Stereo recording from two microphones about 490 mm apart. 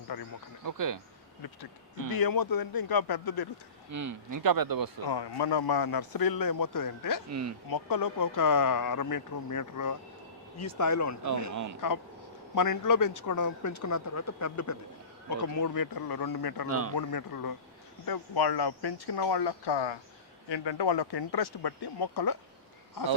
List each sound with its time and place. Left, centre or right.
0.1 s speech: left
0.6 s speech: right
2.1 s speech: left
3.9 s speech: right
5.0 s speech: left
7.3 s speech: right
7.7 s speech: left
16.6 s speech: right
17.0 s speech: left